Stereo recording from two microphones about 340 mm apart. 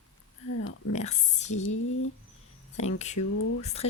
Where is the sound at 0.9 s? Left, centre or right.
Centre.